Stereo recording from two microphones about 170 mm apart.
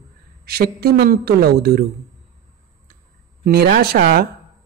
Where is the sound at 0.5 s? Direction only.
65° right (ahead or behind).